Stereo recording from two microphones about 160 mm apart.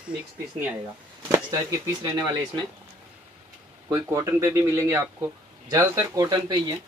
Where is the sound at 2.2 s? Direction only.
25° right (ahead or behind).